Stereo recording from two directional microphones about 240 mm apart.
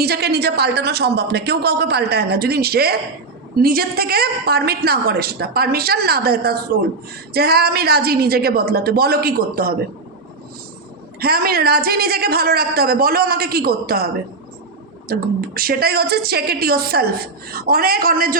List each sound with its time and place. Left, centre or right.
0.0 s a woman's voice: right
11.2 s a woman's voice: right